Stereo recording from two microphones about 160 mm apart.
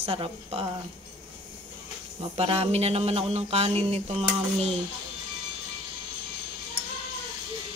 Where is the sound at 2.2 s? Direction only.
35° right (ahead or behind).